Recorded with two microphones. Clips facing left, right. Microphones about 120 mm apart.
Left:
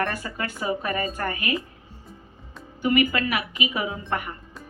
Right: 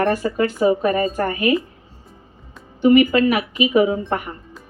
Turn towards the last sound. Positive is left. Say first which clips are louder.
# right 10 dB
turn(degrees=-30)  # may be behind; listen again after turning